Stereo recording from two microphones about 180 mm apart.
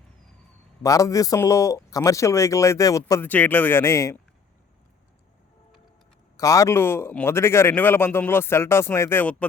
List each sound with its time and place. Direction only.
0.8 s a man's voice: 20° left (ahead or behind)
6.3 s a man's voice: 15° left (ahead or behind)